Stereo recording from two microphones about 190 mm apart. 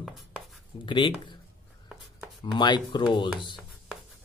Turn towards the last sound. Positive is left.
turn(degrees=25)  # may be behind; listen again after turning